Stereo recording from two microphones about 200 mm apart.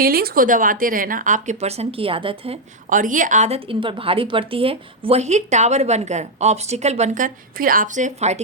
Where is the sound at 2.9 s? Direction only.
40° right (ahead or behind).